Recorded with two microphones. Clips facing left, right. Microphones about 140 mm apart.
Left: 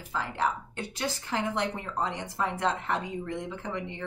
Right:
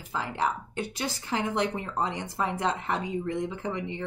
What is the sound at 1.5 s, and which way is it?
Speech, 15° right (ahead or behind).